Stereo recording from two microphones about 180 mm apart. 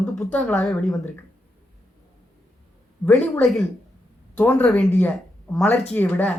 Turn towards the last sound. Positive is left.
turn(degrees=10)  # may be behind; listen again after turning